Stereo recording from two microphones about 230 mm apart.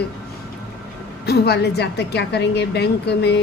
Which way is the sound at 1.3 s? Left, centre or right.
Left.